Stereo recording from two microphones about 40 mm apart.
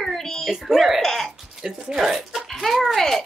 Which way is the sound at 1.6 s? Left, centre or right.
Centre.